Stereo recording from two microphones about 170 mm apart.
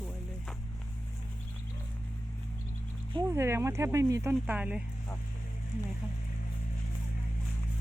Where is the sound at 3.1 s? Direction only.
20° right (ahead or behind).